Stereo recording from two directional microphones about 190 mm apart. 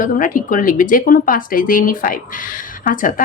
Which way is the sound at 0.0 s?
45° left (ahead or behind).